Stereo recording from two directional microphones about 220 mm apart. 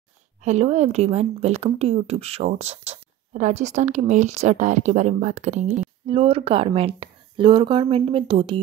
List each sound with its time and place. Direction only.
0.4 s speech: 30° right (ahead or behind)